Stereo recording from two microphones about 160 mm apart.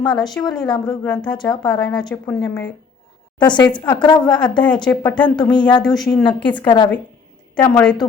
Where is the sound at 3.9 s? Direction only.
25° left (ahead or behind).